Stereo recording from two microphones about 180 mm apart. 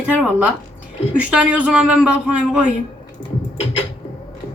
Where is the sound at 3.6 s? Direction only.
30° left (ahead or behind).